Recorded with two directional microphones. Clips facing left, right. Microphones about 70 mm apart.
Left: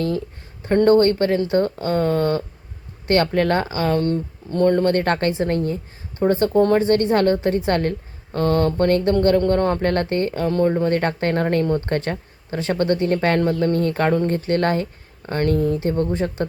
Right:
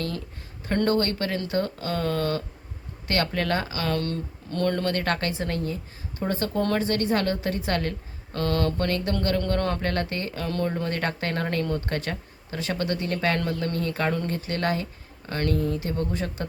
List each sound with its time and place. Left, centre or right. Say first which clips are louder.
0.6 s a man's voice: left 9 dB; left
9.9 s speech: left 8 dB; left